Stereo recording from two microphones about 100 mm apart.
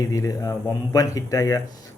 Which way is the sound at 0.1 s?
35° left (ahead or behind).